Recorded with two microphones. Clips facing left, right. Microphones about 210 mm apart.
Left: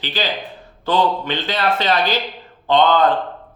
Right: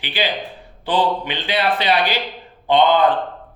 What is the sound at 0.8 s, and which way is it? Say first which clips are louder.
Speech: left 1 dB; 15° right (ahead or behind).